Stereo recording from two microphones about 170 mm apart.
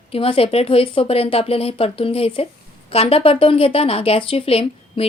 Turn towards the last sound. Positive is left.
turn(degrees=35)  # may be behind; listen again after turning